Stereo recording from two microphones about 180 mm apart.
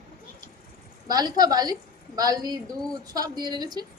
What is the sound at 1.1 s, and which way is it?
A woman's voice, 20° right (ahead or behind).